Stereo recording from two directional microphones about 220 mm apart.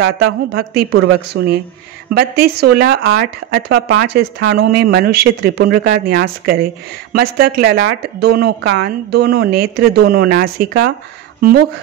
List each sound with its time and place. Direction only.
0.0 s speech: 50° right (ahead or behind)